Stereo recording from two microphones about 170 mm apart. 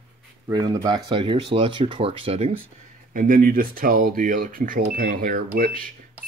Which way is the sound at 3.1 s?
55° right (ahead or behind).